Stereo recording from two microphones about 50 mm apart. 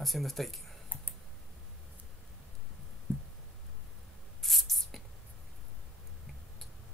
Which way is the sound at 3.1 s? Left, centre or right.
Left.